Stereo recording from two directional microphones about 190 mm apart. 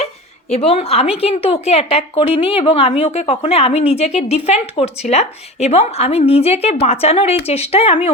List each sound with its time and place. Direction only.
0.5 s a woman's voice: 30° left (ahead or behind)